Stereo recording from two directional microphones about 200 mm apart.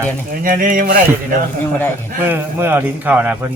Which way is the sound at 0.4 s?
40° right (ahead or behind).